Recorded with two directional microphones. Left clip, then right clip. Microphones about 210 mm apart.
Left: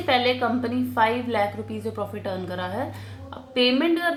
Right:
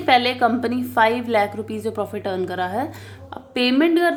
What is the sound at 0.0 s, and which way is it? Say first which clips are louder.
A woman's voice: right 5 dB; 40° right (ahead or behind).